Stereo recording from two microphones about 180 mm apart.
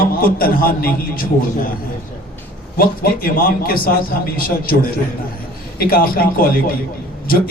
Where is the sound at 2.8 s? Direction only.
55° left (ahead or behind).